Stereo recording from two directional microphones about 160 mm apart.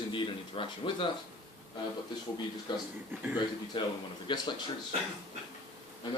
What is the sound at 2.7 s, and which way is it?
Speech, 30° left (ahead or behind).